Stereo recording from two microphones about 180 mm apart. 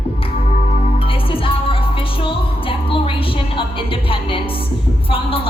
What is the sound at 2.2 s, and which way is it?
Music, 30° left (ahead or behind).